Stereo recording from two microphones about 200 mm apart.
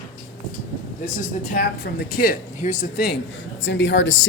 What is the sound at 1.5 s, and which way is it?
Speech, 50° left (ahead or behind).